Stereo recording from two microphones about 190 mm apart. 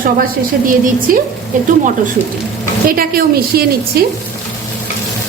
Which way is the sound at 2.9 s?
50° right (ahead or behind).